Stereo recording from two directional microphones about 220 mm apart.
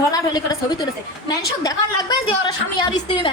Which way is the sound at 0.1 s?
20° left (ahead or behind).